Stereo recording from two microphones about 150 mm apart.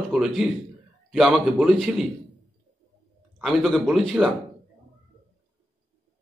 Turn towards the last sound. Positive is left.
turn(degrees=0)  # may be behind; listen again after turning